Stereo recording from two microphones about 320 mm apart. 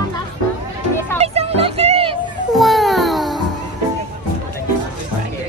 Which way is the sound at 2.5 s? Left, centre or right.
Centre.